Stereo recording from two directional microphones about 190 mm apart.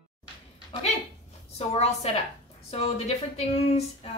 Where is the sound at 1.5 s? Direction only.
35° left (ahead or behind).